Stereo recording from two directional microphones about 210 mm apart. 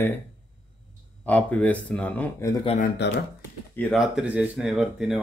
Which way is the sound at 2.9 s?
55° left (ahead or behind).